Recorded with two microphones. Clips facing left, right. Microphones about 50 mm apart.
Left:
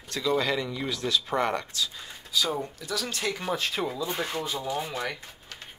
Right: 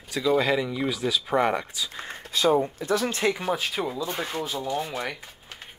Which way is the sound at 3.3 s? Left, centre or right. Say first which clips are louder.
Right 2 dB; centre.